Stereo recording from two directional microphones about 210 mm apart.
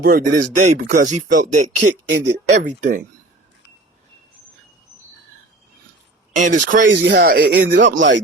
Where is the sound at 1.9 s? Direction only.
55° right (ahead or behind).